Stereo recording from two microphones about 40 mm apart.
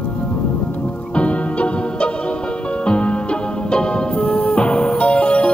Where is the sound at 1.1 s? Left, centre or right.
Left.